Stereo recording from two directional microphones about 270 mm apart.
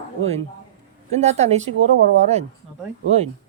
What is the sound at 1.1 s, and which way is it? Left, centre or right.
Speech, right.